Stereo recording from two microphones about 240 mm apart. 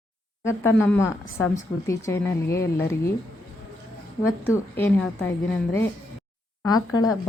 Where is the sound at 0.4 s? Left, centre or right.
Centre.